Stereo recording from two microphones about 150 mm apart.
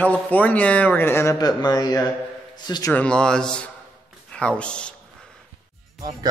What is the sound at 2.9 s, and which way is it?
Speech, 5° left (ahead or behind).